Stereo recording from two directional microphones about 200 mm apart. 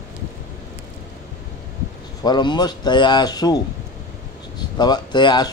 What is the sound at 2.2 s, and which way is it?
A man's voice, 20° left (ahead or behind).